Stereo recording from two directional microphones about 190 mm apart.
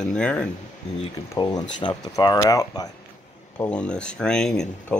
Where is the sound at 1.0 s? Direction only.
25° left (ahead or behind).